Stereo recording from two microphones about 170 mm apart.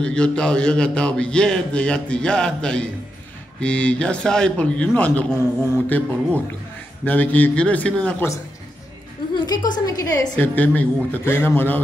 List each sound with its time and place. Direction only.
0.0 s a man's voice: 5° left (ahead or behind)
9.3 s a sound: 25° left (ahead or behind)
9.8 s a woman's voice: 20° left (ahead or behind)
10.3 s a man's voice: 10° left (ahead or behind)